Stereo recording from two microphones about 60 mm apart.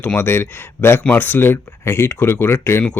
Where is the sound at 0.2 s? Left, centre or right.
Left.